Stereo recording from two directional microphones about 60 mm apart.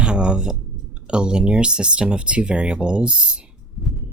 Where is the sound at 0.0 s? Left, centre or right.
Centre.